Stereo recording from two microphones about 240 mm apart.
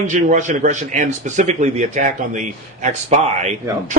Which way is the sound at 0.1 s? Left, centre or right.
Right.